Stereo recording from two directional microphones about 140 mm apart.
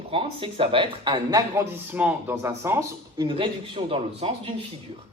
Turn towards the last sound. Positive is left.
turn(degrees=-40)  # may be behind; listen again after turning